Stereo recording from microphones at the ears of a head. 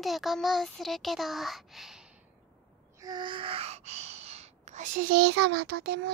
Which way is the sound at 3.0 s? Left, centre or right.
Right.